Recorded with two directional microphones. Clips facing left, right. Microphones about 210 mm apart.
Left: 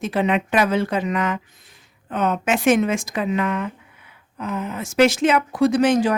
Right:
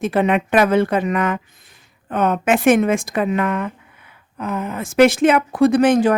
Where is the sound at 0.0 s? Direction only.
55° right (ahead or behind).